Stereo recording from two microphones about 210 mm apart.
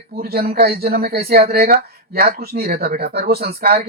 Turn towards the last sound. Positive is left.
turn(degrees=-45)  # may be behind; listen again after turning